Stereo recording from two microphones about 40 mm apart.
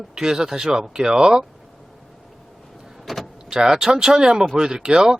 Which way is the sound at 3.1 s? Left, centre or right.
Centre.